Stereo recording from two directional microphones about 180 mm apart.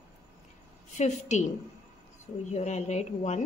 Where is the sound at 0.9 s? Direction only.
40° left (ahead or behind).